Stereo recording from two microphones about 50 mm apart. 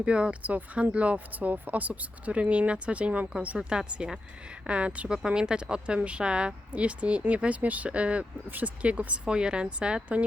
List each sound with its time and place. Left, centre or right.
0.0 s speech: right
3.7 s speech: centre
8.4 s speech: right
8.8 s speech: right